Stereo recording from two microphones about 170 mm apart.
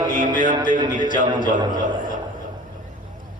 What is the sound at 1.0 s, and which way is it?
Speech, 50° left (ahead or behind).